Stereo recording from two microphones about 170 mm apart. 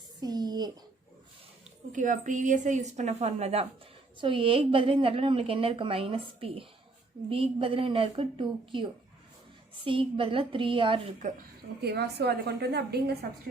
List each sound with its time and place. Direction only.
0.2 s a sound: 25° right (ahead or behind)
1.9 s a woman's voice: 50° right (ahead or behind); by 11.0 s 30° right (ahead or behind)
11.8 s a woman's voice: 75° right (ahead or behind)